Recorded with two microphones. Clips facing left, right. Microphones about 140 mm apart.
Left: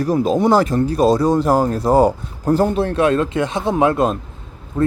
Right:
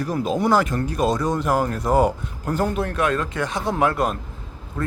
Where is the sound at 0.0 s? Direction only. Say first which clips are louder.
Left 6 dB; 35° left (ahead or behind).